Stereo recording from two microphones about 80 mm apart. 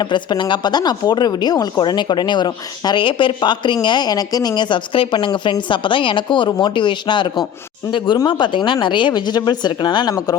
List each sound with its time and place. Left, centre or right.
0.0 s speech: left
1.8 s speech: left
7.9 s speech: left